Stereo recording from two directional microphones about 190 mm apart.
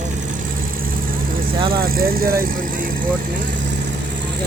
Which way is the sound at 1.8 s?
50° right (ahead or behind).